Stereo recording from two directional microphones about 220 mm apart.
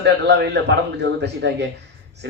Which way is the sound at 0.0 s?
50° right (ahead or behind).